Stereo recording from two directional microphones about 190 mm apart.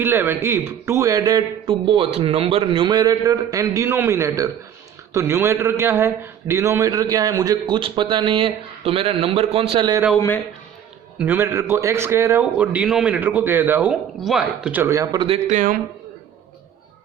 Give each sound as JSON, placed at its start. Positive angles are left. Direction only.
{"t": 0.0, "sound": "a man's voice", "side_deg": -10}
{"t": 10.2, "sound": "a man's voice", "side_deg": 10}
{"t": 11.2, "sound": "a man's voice", "side_deg": -10}
{"t": 15.4, "sound": "a man's voice", "side_deg": -45}